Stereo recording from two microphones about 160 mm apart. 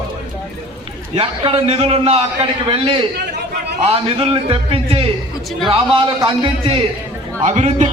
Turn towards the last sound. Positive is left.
turn(degrees=-50)  # may be behind; listen again after turning